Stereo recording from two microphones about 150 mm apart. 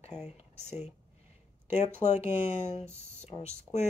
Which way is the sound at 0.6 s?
45° left (ahead or behind).